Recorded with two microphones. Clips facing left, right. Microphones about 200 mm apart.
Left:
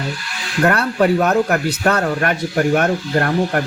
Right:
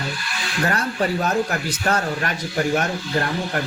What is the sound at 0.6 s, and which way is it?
Speech, 60° left (ahead or behind).